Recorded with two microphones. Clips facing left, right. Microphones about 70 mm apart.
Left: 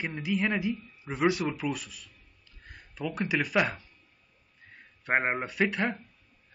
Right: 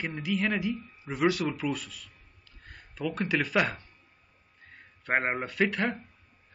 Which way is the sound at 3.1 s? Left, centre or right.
Centre.